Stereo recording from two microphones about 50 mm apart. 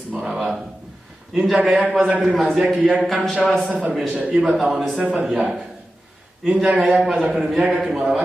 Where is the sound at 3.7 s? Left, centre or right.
Right.